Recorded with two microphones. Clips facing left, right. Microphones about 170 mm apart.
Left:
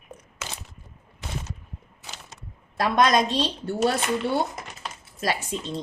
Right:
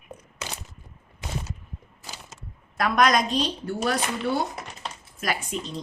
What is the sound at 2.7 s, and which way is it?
A woman's voice, 25° left (ahead or behind).